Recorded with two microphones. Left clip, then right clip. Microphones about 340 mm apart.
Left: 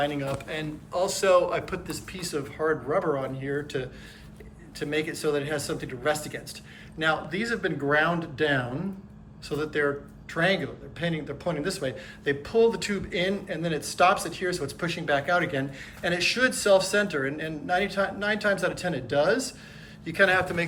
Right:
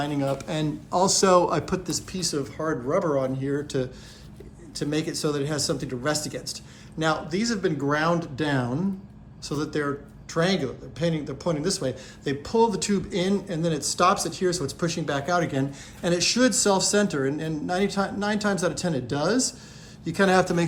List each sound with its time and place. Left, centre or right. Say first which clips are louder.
0.0 s speech: right 1 dB; centre